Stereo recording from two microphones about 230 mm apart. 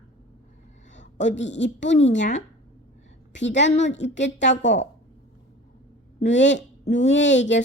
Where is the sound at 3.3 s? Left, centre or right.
Left.